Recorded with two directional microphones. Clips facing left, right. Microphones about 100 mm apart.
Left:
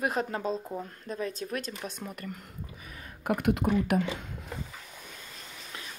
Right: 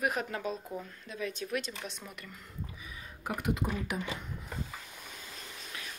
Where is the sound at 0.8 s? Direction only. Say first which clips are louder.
Left 4 dB; 40° left (ahead or behind); by 4.3 s 60° left (ahead or behind).